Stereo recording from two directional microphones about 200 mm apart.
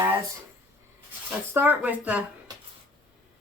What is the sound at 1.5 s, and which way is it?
Speech, 10° right (ahead or behind).